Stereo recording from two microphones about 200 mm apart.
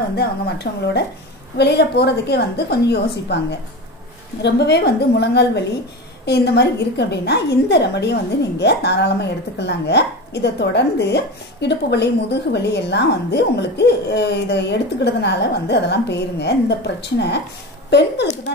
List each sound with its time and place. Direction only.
0.1 s a woman's voice: 55° left (ahead or behind)